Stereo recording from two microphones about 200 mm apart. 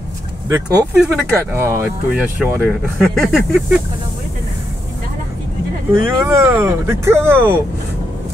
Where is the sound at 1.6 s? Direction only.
10° right (ahead or behind).